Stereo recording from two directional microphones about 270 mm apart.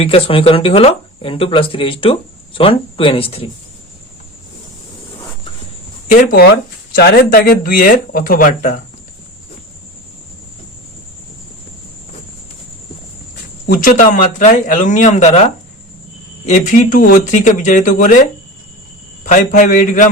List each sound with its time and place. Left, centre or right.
0.0 s speech: centre
6.1 s speech: left
13.7 s speech: left
16.5 s speech: left
19.2 s speech: left